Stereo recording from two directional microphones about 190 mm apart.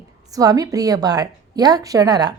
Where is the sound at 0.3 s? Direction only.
20° right (ahead or behind).